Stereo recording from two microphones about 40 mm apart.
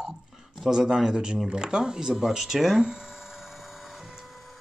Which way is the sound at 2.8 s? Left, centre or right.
Centre.